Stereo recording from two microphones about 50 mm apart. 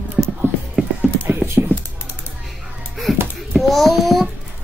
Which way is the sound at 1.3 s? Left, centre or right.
Right.